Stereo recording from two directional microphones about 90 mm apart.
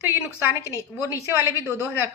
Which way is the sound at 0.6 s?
35° right (ahead or behind).